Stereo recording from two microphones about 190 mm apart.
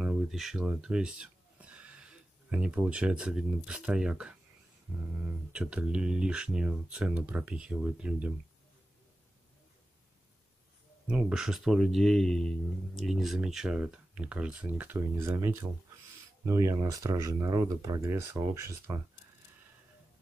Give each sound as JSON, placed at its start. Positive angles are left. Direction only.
{"t": 0.0, "sound": "speech", "side_deg": 0}
{"t": 5.5, "sound": "speech", "side_deg": -5}
{"t": 11.1, "sound": "speech", "side_deg": -5}